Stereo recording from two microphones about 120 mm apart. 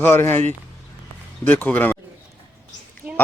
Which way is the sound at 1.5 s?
15° left (ahead or behind).